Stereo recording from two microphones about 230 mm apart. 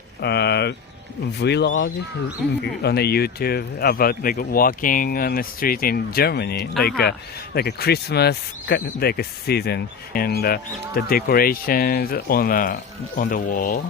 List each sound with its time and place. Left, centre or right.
0.2 s speech: left
2.4 s speech: centre
2.8 s speech: left